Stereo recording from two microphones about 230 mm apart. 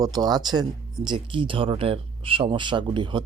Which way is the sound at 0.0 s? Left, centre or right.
Centre.